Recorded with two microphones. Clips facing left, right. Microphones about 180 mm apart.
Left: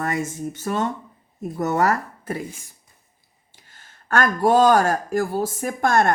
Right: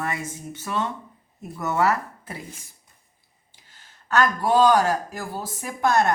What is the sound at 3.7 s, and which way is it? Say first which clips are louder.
Speech: even; 50° left (ahead or behind).